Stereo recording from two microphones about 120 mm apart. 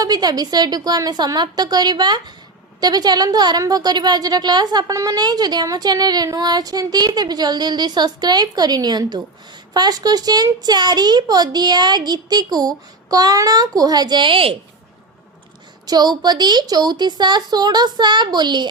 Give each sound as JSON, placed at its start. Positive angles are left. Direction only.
{"t": 0.0, "sound": "a woman's voice", "side_deg": -35}
{"t": 15.9, "sound": "a woman's voice", "side_deg": -35}